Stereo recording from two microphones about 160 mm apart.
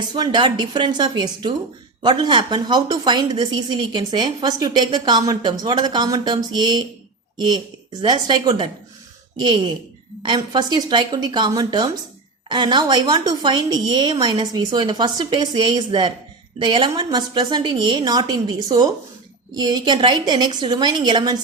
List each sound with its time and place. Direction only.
0.1 s a woman's voice: 30° right (ahead or behind)